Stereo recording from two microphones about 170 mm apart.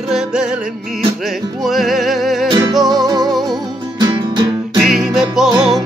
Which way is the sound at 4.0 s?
25° right (ahead or behind).